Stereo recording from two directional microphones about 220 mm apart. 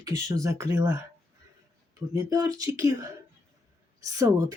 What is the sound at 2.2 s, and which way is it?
Speech, 15° right (ahead or behind).